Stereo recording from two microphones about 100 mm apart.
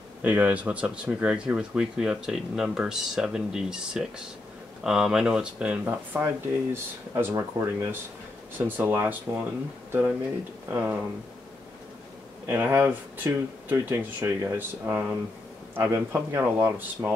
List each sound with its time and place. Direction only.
0.2 s speech: 15° right (ahead or behind)
10.7 s speech: 25° right (ahead or behind)
12.4 s speech: 20° right (ahead or behind)